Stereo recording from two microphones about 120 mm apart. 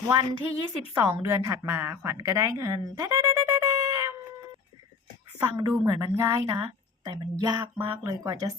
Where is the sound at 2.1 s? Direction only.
30° right (ahead or behind).